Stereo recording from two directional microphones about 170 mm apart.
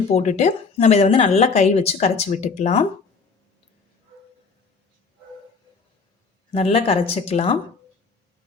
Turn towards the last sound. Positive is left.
turn(degrees=35)  # may be behind; listen again after turning